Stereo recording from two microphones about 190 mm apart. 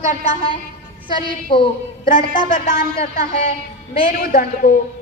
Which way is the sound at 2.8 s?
50° left (ahead or behind).